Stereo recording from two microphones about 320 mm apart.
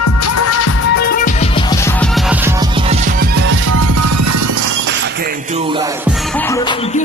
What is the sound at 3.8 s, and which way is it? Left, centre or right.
Music, right.